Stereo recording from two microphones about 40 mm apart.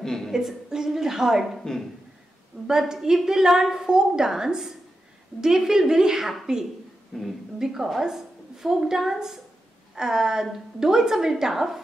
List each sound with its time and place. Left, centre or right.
0.0 s a sound: centre
0.3 s a woman's voice: centre
1.6 s speech: centre
2.6 s a woman's voice: centre
7.1 s speech: centre
7.5 s a woman's voice: centre